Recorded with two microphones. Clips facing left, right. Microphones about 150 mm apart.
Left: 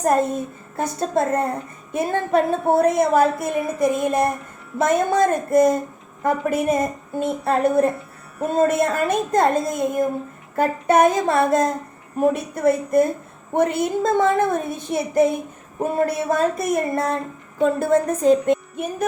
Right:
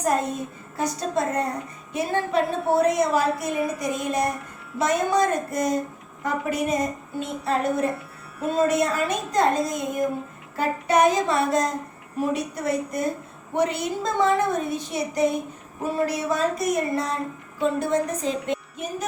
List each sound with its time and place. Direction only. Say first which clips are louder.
0.0 s a woman's voice: left 5 dB; 50° left (ahead or behind)